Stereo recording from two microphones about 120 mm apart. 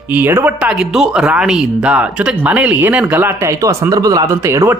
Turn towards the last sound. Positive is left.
turn(degrees=-20)  # may be behind; listen again after turning